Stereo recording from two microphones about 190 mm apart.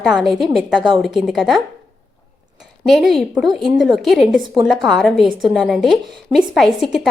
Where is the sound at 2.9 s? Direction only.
Centre (ahead or behind).